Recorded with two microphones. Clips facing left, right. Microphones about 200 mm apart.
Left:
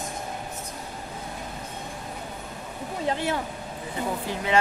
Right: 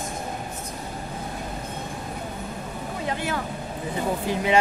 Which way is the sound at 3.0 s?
30° left (ahead or behind).